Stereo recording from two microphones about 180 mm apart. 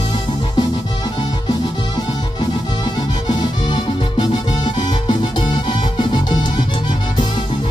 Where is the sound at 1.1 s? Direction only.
20° left (ahead or behind).